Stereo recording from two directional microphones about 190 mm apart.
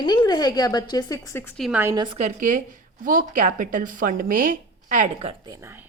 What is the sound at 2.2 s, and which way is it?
A woman's voice, 40° right (ahead or behind).